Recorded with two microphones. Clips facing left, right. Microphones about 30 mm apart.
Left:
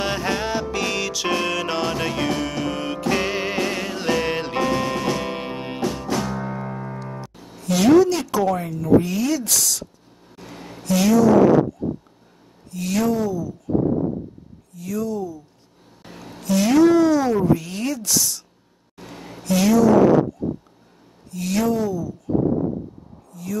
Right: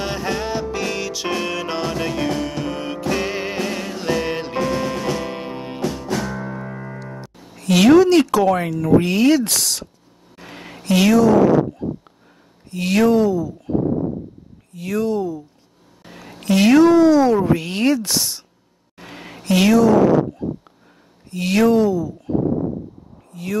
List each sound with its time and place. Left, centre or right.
0.0 s music: centre
1.0 s music: centre
1.8 s music: centre
6.2 s music: centre
7.5 s speech: right
10.3 s a sound: right
12.7 s speech: right
17.4 s speech: right
18.9 s a sound: right
21.3 s speech: right
23.3 s speech: right